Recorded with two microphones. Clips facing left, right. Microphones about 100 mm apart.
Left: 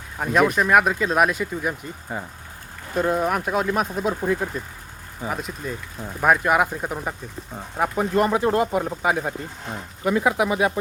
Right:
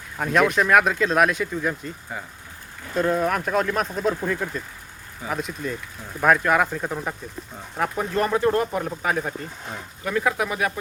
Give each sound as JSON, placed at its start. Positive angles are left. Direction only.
{"t": 0.2, "sound": "speech", "side_deg": 5}
{"t": 2.1, "sound": "speech", "side_deg": 35}
{"t": 2.9, "sound": "speech", "side_deg": 10}